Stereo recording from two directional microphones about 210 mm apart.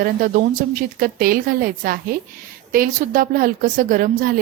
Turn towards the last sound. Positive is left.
turn(degrees=-40)  # may be behind; listen again after turning